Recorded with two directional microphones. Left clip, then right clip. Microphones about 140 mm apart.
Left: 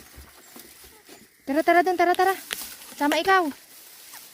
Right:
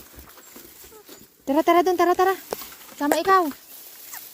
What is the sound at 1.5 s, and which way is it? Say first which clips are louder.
Speech: right 1 dB; 20° right (ahead or behind).